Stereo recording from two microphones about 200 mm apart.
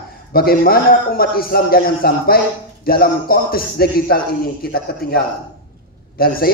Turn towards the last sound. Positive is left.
turn(degrees=50)  # may be behind; listen again after turning